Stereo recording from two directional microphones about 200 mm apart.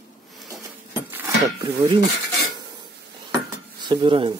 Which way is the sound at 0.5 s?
15° right (ahead or behind).